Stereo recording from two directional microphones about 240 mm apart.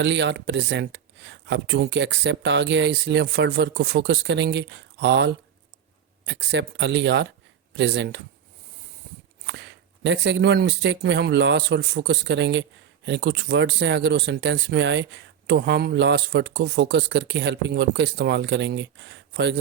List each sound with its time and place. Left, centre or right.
0.0 s speech: right
9.5 s speech: right